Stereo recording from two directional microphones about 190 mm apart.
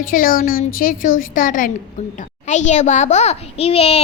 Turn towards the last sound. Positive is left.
turn(degrees=30)  # may be behind; listen again after turning